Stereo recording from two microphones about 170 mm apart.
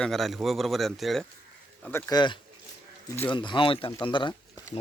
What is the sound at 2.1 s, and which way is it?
Speech, 25° left (ahead or behind).